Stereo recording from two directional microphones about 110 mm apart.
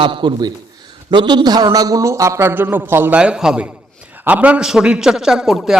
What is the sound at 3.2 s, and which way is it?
A man's voice, 5° right (ahead or behind).